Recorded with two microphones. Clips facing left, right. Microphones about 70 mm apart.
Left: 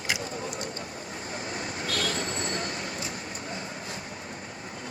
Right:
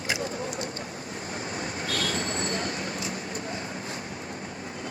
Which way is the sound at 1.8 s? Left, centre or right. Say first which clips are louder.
Even; right.